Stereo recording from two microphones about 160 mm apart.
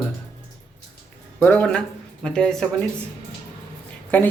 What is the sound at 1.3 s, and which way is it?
Speech, 10° left (ahead or behind).